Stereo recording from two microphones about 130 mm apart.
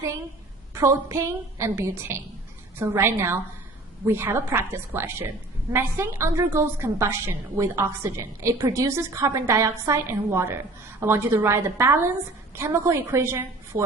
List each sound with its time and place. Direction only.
0.7 s a woman's voice: 25° right (ahead or behind)